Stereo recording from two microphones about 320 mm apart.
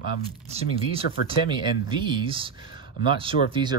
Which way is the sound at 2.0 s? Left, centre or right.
Centre.